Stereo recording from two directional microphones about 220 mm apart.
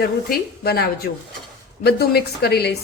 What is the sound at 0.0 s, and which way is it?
A woman's voice, 45° left (ahead or behind).